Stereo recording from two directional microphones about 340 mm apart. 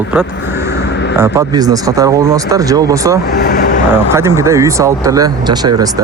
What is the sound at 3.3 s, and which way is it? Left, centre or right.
Vehicle, left.